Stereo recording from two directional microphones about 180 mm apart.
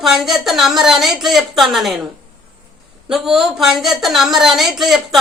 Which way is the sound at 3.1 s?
5° right (ahead or behind).